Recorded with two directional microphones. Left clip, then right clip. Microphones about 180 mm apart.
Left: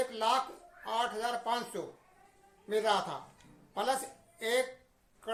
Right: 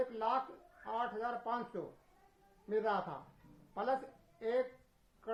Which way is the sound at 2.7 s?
20° left (ahead or behind).